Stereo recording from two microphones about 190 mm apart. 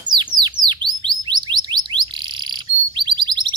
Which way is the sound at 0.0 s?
25° right (ahead or behind).